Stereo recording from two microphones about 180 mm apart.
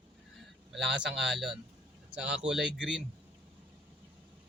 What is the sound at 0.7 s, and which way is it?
Speech, centre (ahead or behind).